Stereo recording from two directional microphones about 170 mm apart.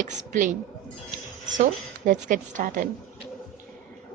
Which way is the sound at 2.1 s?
50° right (ahead or behind).